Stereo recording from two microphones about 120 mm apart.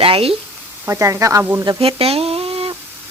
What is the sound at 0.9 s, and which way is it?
Speech, 25° right (ahead or behind).